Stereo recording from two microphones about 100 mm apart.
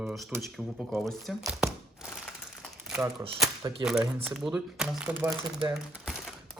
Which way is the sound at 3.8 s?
45° right (ahead or behind).